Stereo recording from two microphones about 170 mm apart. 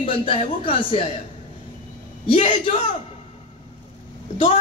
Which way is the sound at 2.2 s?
30° left (ahead or behind).